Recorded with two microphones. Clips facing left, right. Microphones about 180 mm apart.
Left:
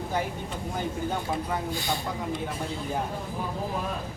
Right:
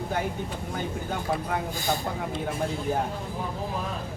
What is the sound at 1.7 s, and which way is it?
Speech, 45° right (ahead or behind).